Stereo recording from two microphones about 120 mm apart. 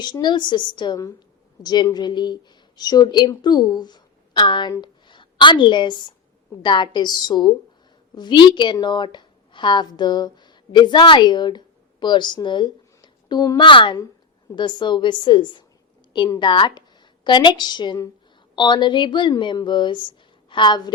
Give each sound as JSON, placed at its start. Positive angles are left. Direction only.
{"t": 0.0, "sound": "a woman's voice", "side_deg": 40}
{"t": 13.6, "sound": "a woman's voice", "side_deg": 40}